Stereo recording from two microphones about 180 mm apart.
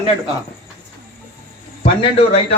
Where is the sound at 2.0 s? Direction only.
35° left (ahead or behind).